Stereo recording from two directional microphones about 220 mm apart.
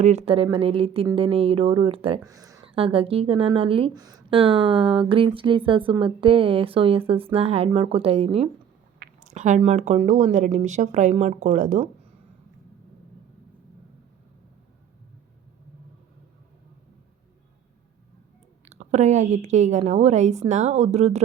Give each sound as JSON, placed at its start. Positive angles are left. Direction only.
{"t": 0.0, "sound": "speech", "side_deg": -30}
{"t": 18.6, "sound": "speech", "side_deg": -30}